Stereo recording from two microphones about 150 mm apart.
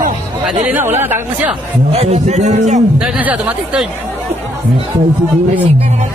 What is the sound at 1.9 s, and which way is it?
Speech, 45° right (ahead or behind).